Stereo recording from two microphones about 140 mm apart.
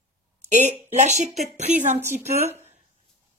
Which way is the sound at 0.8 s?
55° right (ahead or behind).